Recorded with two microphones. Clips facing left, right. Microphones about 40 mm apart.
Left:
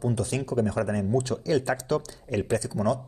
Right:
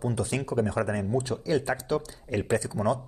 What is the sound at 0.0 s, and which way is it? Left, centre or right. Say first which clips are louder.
Speech: left 1 dB; centre.